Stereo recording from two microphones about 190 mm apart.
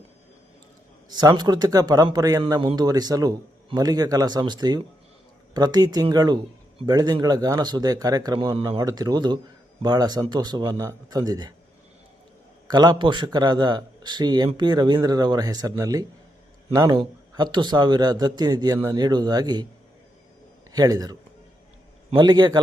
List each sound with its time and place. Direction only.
1.1 s a man's voice: 20° right (ahead or behind)
12.6 s a man's voice: 20° right (ahead or behind)
20.7 s a man's voice: 20° right (ahead or behind)